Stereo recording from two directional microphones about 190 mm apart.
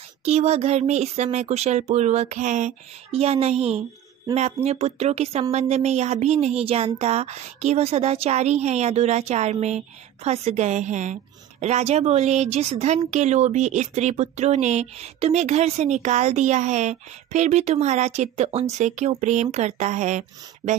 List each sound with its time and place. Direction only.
0.2 s a woman's voice: 35° right (ahead or behind)